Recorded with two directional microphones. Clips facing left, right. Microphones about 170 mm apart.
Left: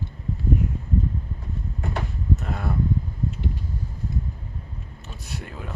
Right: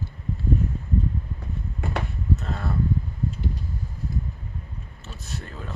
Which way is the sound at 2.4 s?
10° left (ahead or behind).